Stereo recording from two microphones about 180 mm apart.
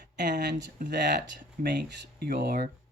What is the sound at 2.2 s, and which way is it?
Speech, 60° right (ahead or behind).